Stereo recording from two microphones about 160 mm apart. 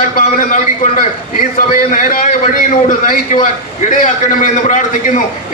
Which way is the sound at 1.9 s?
55° left (ahead or behind).